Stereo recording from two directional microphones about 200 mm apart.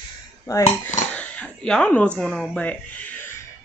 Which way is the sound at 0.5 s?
15° left (ahead or behind).